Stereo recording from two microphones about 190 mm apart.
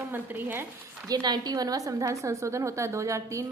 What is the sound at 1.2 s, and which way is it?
A woman's voice, 20° right (ahead or behind).